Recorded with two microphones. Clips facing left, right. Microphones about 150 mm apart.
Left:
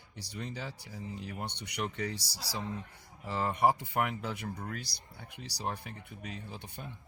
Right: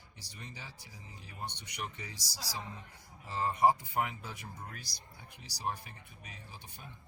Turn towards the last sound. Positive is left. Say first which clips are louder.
# left 8 dB
turn(degrees=65)  # may be behind; listen again after turning